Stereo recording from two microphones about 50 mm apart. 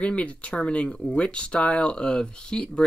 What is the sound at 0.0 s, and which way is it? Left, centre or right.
Speech, left.